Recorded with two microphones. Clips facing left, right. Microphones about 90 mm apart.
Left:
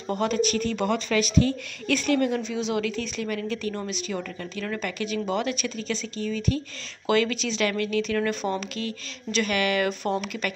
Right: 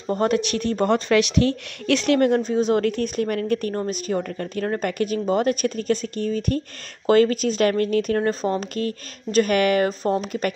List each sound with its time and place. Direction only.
0.1 s a woman's voice: 50° right (ahead or behind)
1.5 s a woman's voice: 65° right (ahead or behind); by 10.5 s 40° right (ahead or behind)